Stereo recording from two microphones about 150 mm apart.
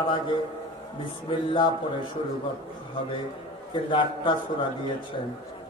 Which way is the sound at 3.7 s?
30° left (ahead or behind).